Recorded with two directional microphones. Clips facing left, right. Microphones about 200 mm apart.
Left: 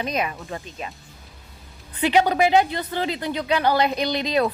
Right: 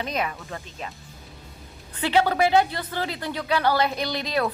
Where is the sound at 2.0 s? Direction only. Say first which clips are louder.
Left 2 dB; 15° left (ahead or behind).